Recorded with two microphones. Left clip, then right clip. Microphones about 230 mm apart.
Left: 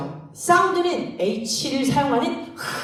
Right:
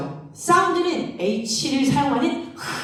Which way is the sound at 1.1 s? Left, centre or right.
Left.